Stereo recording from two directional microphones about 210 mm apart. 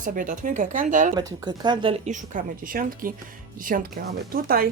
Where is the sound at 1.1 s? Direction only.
15° right (ahead or behind); by 4.7 s 45° right (ahead or behind).